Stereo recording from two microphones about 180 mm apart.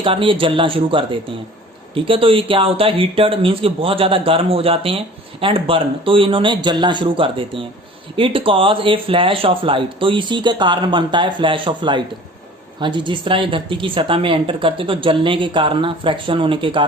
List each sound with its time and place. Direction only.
0.0 s speech: 30° right (ahead or behind)